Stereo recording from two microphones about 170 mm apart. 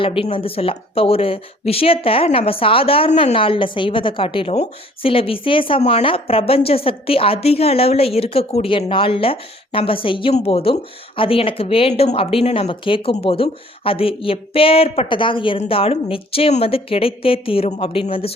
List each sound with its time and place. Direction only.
0.0 s a woman's voice: 30° left (ahead or behind)